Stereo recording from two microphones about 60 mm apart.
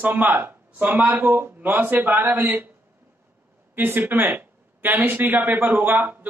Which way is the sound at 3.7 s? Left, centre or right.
Right.